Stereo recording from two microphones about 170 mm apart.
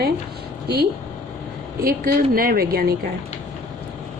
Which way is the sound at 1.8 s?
65° right (ahead or behind).